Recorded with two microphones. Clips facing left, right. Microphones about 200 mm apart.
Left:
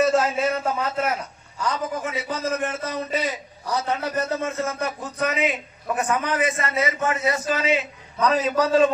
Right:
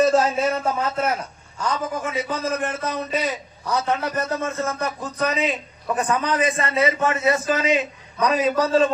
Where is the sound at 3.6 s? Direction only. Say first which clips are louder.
Right 2 dB; 55° right (ahead or behind).